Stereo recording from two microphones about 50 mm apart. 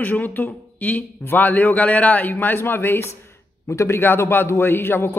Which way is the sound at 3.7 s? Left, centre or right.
Left.